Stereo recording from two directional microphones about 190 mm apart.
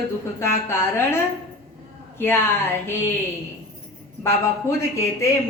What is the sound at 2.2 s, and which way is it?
Speech, 10° left (ahead or behind).